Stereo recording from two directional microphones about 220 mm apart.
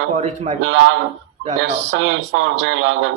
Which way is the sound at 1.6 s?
55° right (ahead or behind).